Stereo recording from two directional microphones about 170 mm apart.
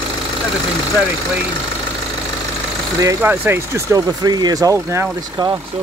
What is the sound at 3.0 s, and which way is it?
Speech, 10° right (ahead or behind).